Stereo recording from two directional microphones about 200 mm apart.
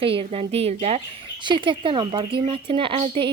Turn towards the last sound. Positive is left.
turn(degrees=-30)  # may be behind; listen again after turning